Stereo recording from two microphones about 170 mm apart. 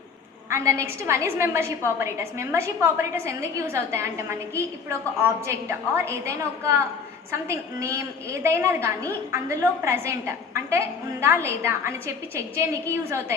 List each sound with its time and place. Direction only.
0.5 s a woman's voice: 15° right (ahead or behind)